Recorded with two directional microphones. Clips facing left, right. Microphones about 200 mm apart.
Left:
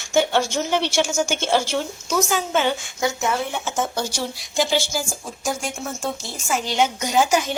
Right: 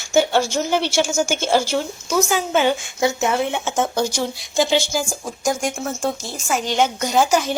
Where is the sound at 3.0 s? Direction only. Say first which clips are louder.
Right 4 dB; 25° right (ahead or behind).